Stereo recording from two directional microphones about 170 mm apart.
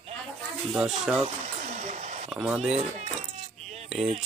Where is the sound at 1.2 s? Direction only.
45° right (ahead or behind).